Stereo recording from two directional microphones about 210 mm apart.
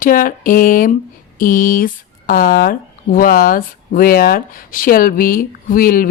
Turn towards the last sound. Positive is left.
turn(degrees=40)  # may be behind; listen again after turning